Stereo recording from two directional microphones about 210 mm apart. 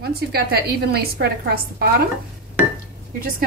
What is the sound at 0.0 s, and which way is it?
A woman's voice, 50° right (ahead or behind).